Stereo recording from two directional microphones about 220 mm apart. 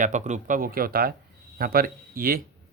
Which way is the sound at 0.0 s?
35° right (ahead or behind).